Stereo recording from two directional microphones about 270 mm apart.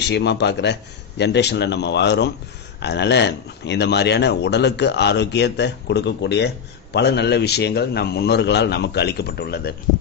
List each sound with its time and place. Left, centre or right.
0.0 s speech: left